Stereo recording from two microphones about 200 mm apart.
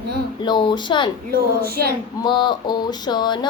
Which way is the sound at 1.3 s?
50° right (ahead or behind).